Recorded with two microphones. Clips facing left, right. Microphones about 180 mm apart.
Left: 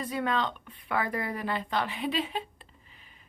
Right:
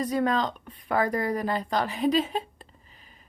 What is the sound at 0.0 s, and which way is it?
Speech, 40° right (ahead or behind).